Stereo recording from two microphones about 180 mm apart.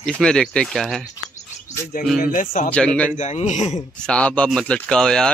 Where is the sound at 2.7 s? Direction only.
5° left (ahead or behind).